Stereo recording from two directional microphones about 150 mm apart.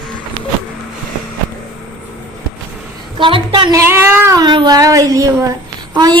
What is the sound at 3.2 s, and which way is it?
A woman's voice, 35° right (ahead or behind).